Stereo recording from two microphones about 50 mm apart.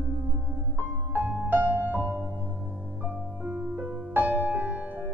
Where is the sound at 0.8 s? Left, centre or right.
Right.